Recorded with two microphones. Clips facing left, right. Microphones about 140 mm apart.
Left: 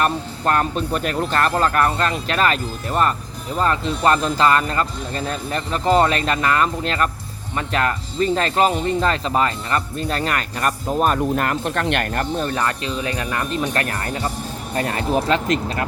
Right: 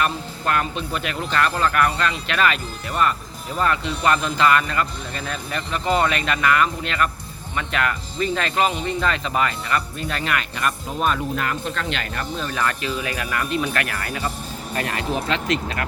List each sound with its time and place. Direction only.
0.0 s speech: 40° left (ahead or behind); by 12.5 s 55° left (ahead or behind)
12.5 s speech: 30° left (ahead or behind)